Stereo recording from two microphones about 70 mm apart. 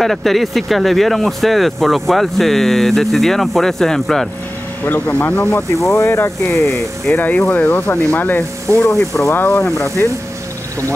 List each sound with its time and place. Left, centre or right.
0.0 s speech: centre
4.8 s speech: left
5.9 s speech: left
7.1 s speech: left